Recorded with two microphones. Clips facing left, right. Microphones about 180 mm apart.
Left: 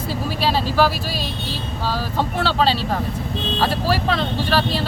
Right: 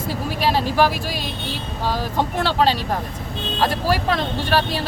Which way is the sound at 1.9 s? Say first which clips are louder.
Right 1 dB; 15° right (ahead or behind).